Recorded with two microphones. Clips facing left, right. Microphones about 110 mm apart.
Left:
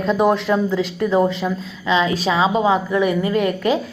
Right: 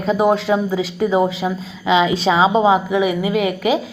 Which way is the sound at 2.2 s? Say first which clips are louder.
Right 3 dB; 30° right (ahead or behind).